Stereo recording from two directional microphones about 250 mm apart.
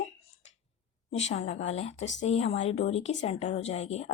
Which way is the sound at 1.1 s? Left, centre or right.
Left.